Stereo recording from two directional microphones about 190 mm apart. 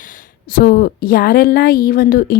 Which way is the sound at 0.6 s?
50° left (ahead or behind).